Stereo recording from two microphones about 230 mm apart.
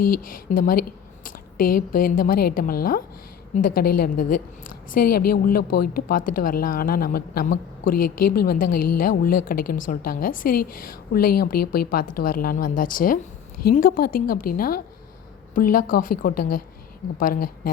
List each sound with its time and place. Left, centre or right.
0.2 s a woman's voice: left